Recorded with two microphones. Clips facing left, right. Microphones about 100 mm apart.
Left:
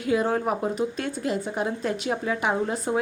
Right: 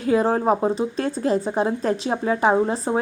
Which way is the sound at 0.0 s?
35° right (ahead or behind).